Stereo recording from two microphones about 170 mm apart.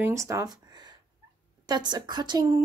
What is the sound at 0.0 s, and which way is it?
Speech, 15° right (ahead or behind).